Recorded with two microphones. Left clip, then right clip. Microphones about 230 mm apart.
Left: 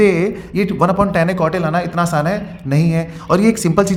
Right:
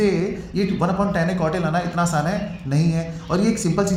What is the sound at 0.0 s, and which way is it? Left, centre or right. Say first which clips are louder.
A man's voice: left 7 dB; left.